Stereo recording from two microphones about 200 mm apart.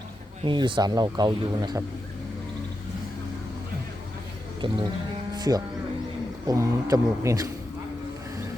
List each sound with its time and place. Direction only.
0.4 s speech: 25° right (ahead or behind)
4.6 s speech: 25° right (ahead or behind)
5.3 s music: 20° right (ahead or behind)
6.5 s speech: 15° right (ahead or behind)